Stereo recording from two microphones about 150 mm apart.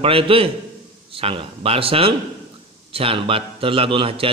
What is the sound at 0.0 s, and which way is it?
A man's voice, 40° right (ahead or behind).